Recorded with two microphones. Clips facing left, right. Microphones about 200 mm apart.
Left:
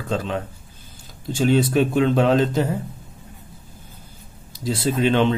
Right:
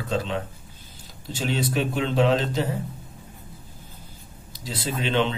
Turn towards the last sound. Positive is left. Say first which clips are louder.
# left 6 dB
turn(degrees=50)  # may be behind; listen again after turning